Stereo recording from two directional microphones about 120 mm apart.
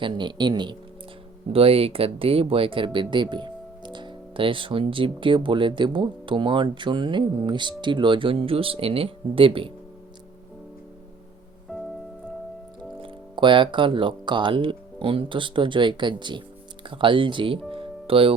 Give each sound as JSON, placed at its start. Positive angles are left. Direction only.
{"t": 0.0, "sound": "speech", "side_deg": -40}
{"t": 1.5, "sound": "speech", "side_deg": -55}
{"t": 11.7, "sound": "music", "side_deg": -5}
{"t": 13.0, "sound": "speech", "side_deg": -45}
{"t": 17.7, "sound": "music", "side_deg": -50}